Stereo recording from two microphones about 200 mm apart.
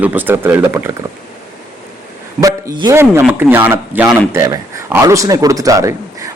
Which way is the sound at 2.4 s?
15° right (ahead or behind).